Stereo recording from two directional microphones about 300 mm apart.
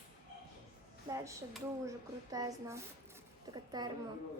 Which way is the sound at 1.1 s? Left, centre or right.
Centre.